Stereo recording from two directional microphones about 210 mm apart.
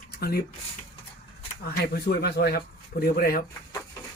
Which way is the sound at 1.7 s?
50° left (ahead or behind).